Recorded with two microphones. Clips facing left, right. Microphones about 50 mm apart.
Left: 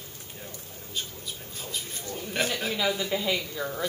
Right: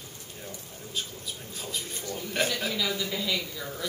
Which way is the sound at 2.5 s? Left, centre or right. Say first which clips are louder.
Left 2 dB; centre.